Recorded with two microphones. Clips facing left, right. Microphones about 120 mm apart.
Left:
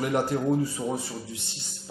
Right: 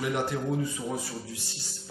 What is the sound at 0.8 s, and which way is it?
Speech, 25° left (ahead or behind).